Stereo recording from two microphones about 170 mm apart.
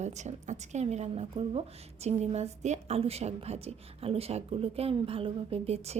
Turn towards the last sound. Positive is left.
turn(degrees=-40)  # may be behind; listen again after turning